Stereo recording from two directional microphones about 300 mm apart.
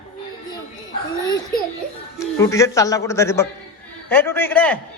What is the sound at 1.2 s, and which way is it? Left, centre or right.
A child's voice, centre.